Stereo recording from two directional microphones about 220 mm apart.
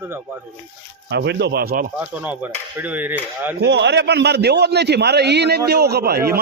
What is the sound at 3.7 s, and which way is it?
A man's voice, 50° right (ahead or behind).